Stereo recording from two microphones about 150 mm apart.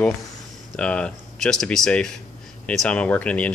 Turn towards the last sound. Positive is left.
turn(degrees=10)  # may be behind; listen again after turning